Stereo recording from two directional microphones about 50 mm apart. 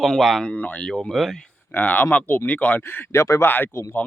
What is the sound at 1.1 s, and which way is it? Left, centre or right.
Speech, centre.